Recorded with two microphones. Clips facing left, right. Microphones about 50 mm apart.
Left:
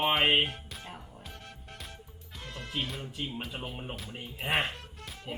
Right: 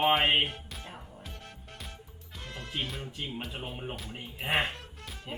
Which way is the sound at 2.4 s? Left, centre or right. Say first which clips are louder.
Even; centre.